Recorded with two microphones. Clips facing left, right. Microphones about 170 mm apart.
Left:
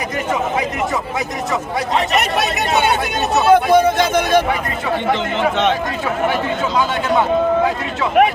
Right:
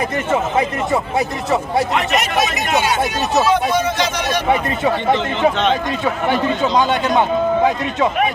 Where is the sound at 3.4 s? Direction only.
55° left (ahead or behind).